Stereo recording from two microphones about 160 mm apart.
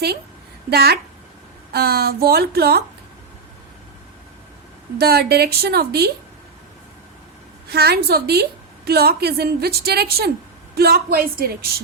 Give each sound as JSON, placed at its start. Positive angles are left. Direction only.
{"t": 0.7, "sound": "a woman's voice", "side_deg": -75}
{"t": 4.9, "sound": "a woman's voice", "side_deg": -80}
{"t": 7.7, "sound": "a woman's voice", "side_deg": -80}